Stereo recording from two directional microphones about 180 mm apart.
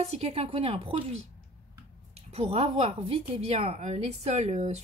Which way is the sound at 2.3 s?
35° right (ahead or behind).